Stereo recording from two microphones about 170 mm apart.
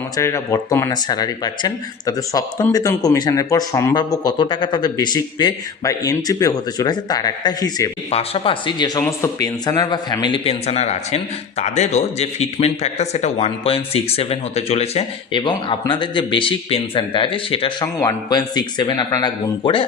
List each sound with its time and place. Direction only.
0.2 s speech: 15° left (ahead or behind)
8.1 s speech: 35° left (ahead or behind)